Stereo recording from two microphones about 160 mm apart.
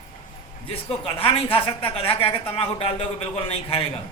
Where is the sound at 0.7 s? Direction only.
35° left (ahead or behind).